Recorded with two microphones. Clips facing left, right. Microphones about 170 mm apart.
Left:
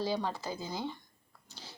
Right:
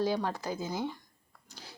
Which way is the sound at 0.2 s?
15° right (ahead or behind).